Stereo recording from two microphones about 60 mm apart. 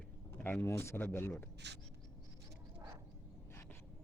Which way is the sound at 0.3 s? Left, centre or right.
Left.